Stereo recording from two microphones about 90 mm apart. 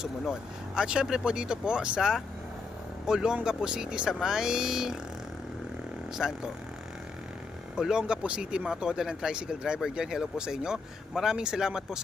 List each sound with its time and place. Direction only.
0.8 s speech: 10° right (ahead or behind)
6.1 s speech: 5° right (ahead or behind)
7.8 s speech: 5° right (ahead or behind)